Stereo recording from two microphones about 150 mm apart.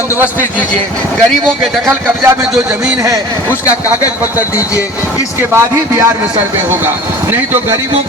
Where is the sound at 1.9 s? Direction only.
15° right (ahead or behind).